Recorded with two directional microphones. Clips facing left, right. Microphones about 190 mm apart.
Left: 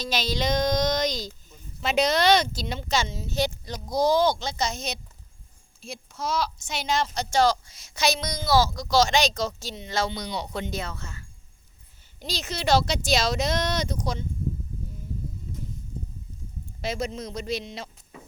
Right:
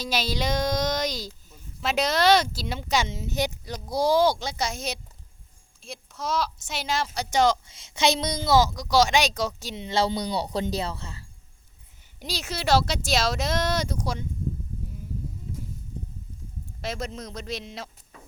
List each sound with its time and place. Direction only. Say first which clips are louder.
0.0 s a woman's voice: even; 10° right (ahead or behind)
9.7 s speech: right 6 dB; 30° right (ahead or behind)
12.2 s speech: left 1 dB; 10° right (ahead or behind)
16.8 s speech: left 3 dB; centre (ahead or behind)